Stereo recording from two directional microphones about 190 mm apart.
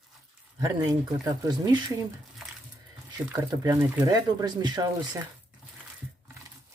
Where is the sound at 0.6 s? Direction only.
20° right (ahead or behind).